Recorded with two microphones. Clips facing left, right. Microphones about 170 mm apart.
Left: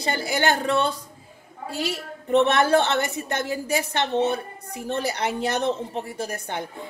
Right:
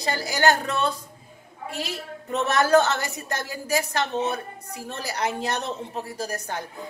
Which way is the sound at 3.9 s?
30° left (ahead or behind).